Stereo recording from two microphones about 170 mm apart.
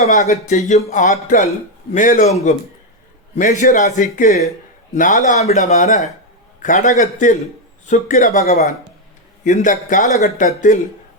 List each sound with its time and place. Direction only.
0.0 s speech: 40° left (ahead or behind)
3.3 s speech: 45° left (ahead or behind)